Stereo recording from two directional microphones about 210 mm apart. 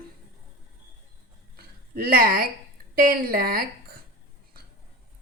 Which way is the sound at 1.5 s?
45° right (ahead or behind).